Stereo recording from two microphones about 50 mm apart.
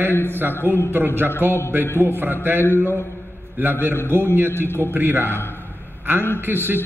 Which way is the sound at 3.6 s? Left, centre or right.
Right.